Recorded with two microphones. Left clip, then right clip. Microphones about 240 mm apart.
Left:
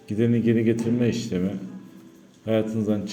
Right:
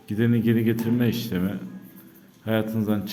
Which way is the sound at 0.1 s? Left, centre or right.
Centre.